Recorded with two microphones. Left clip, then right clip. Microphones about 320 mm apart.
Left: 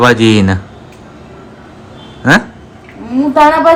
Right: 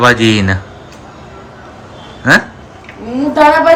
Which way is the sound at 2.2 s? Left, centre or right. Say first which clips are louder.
Even; centre.